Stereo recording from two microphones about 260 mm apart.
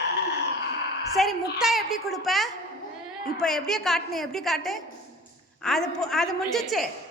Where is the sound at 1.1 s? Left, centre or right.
Centre.